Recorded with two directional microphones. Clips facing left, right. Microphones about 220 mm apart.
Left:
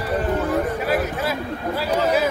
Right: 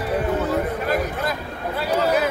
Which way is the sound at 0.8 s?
5° left (ahead or behind).